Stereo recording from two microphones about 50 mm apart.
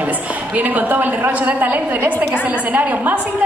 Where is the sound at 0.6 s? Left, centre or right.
Right.